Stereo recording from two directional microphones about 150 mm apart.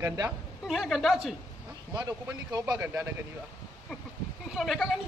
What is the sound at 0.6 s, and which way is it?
Speech, centre (ahead or behind).